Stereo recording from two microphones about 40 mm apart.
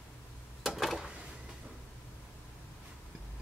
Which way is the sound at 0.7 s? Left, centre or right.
Centre.